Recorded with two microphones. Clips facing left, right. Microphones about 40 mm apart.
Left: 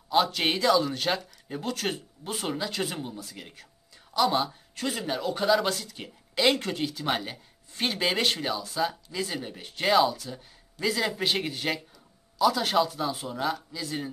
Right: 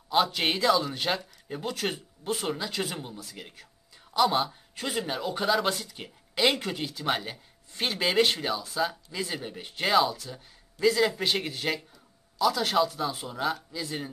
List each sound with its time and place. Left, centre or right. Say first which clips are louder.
0.1 s a man's voice: left 1 dB; centre